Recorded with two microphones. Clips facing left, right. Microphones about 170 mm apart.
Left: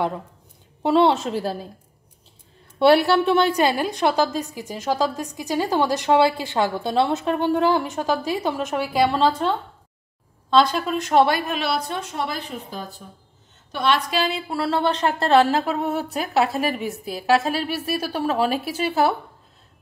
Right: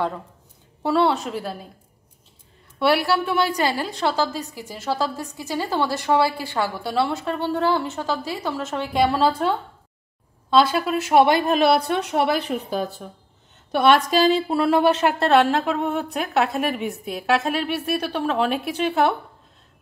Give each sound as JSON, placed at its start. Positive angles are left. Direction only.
{"t": 0.8, "sound": "a woman's voice", "side_deg": 20}
{"t": 2.8, "sound": "a woman's voice", "side_deg": 25}
{"t": 11.4, "sound": "a woman's voice", "side_deg": -45}
{"t": 13.7, "sound": "a woman's voice", "side_deg": -55}
{"t": 14.5, "sound": "a woman's voice", "side_deg": -15}